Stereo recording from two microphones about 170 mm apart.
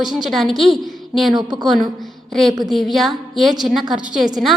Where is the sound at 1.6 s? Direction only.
Centre (ahead or behind).